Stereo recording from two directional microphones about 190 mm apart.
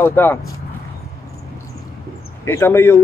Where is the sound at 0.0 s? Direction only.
10° left (ahead or behind).